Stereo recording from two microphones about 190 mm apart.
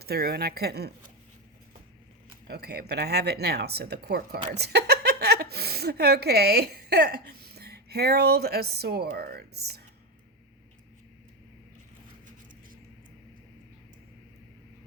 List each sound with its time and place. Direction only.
0.0 s speech: 55° right (ahead or behind)
2.5 s a woman's voice: 55° right (ahead or behind)